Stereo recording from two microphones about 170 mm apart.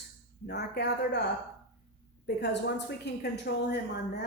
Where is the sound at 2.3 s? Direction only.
85° left.